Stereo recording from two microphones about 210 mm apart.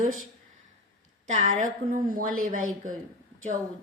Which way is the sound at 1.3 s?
35° right (ahead or behind).